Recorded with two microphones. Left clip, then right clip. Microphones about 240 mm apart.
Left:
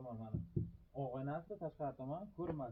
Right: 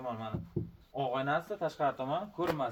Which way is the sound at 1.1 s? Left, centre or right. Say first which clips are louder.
Right 15 dB; centre.